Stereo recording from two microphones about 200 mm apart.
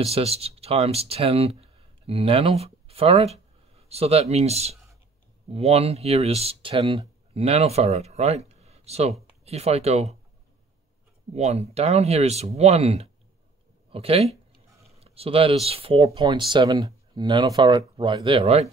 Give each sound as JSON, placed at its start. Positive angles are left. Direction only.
{"t": 0.0, "sound": "speech", "side_deg": -30}
{"t": 11.3, "sound": "speech", "side_deg": -30}